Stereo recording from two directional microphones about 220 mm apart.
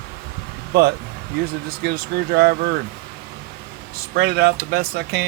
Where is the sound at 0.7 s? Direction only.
45° right (ahead or behind).